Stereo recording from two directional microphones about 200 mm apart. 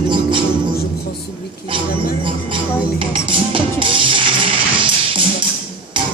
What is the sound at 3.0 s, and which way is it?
Music, 25° right (ahead or behind).